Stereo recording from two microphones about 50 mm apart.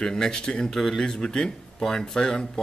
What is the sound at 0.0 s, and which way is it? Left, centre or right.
Speech, centre.